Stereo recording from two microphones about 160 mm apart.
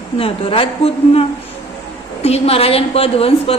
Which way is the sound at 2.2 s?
40° left (ahead or behind).